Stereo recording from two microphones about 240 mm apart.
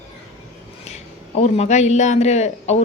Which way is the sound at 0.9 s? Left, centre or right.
Left.